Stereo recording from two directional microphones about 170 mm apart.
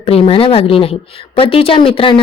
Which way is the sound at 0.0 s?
35° left (ahead or behind).